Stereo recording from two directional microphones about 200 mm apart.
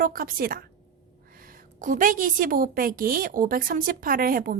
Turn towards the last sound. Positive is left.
turn(degrees=-45)  # may be behind; listen again after turning